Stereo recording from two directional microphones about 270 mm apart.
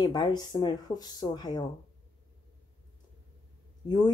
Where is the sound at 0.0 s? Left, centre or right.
Centre.